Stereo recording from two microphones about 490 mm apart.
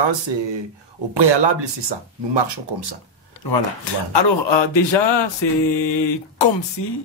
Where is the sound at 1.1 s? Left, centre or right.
Right.